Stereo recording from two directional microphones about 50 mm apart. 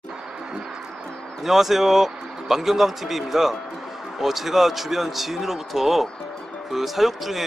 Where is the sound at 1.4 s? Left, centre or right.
Centre.